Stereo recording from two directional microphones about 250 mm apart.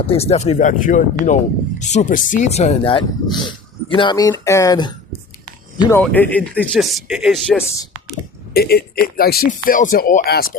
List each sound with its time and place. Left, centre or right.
0.1 s speech: left
6.0 s speech: centre
8.5 s speech: left